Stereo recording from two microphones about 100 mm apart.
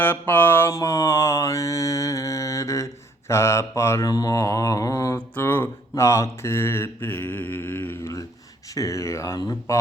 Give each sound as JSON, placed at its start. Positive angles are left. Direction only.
{"t": 0.0, "sound": "mantra", "side_deg": 20}
{"t": 0.7, "sound": "mantra", "side_deg": 35}
{"t": 4.4, "sound": "a sound", "side_deg": 30}
{"t": 5.1, "sound": "speech", "side_deg": 20}
{"t": 7.5, "sound": "mantra", "side_deg": 20}
{"t": 8.7, "sound": "speech", "side_deg": 30}